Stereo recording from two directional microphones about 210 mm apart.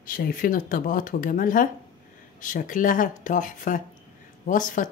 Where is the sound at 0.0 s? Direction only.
45° left (ahead or behind).